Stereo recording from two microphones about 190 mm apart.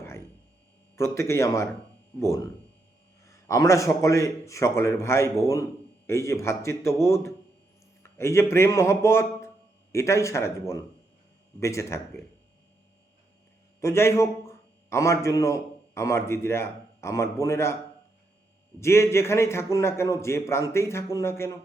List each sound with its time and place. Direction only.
0.9 s a man's voice: 15° left (ahead or behind)
13.8 s a man's voice: 15° left (ahead or behind)
18.8 s a man's voice: 15° left (ahead or behind)